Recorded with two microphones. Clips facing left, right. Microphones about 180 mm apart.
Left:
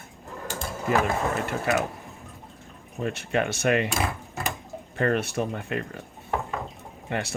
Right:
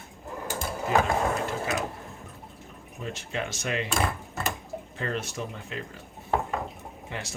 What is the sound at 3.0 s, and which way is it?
Speech, 60° left (ahead or behind).